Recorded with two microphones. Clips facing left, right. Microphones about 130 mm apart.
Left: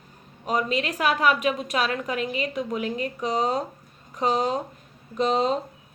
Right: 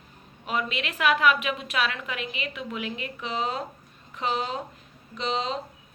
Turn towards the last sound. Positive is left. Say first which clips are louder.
# left 7 dB
turn(degrees=45)  # may be behind; listen again after turning